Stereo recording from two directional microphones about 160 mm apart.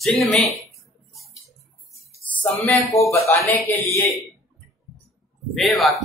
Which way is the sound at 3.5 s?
10° left (ahead or behind).